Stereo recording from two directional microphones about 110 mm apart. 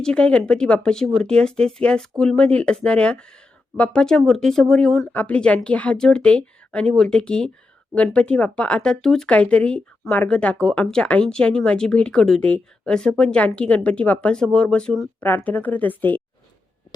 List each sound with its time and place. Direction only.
0.0 s speech: 10° left (ahead or behind)